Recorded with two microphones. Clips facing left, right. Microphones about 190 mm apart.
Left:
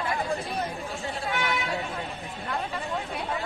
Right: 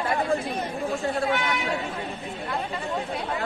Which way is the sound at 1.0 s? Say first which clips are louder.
Right 4 dB; centre (ahead or behind).